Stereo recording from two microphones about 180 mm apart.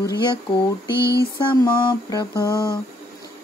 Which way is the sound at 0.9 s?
15° right (ahead or behind).